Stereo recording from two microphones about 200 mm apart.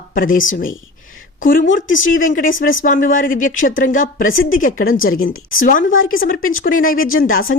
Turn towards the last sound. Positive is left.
turn(degrees=45)  # may be behind; listen again after turning